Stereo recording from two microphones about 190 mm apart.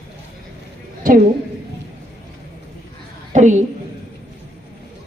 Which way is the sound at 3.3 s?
40° right (ahead or behind).